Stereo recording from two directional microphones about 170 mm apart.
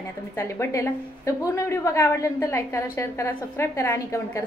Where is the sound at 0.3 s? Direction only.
15° left (ahead or behind).